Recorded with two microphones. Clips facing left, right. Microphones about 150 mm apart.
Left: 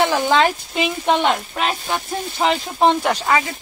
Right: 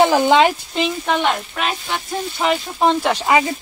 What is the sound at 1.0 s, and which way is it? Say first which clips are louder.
Speech: left 2 dB; 20° left (ahead or behind).